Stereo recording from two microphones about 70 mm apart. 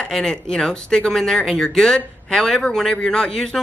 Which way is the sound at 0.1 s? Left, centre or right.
Centre.